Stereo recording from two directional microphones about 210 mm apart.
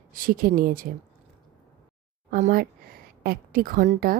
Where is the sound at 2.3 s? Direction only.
45° right (ahead or behind).